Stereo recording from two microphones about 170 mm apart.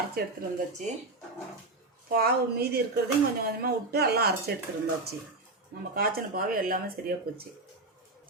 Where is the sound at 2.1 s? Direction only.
65° right (ahead or behind).